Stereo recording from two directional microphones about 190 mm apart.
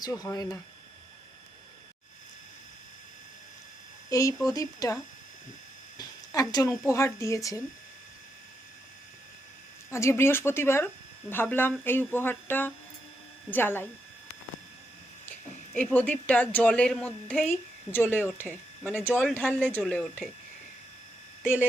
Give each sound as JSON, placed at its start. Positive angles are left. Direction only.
{"t": 0.0, "sound": "speech", "side_deg": 20}
{"t": 4.1, "sound": "music", "side_deg": 15}
{"t": 6.0, "sound": "a sound", "side_deg": 20}
{"t": 6.8, "sound": "music", "side_deg": 15}
{"t": 9.9, "sound": "music", "side_deg": 15}
{"t": 15.3, "sound": "speech", "side_deg": 5}
{"t": 17.9, "sound": "music", "side_deg": 10}
{"t": 18.2, "sound": "speech", "side_deg": -5}
{"t": 18.4, "sound": "speech", "side_deg": 5}
{"t": 19.3, "sound": "music", "side_deg": 10}
{"t": 19.8, "sound": "speech", "side_deg": 5}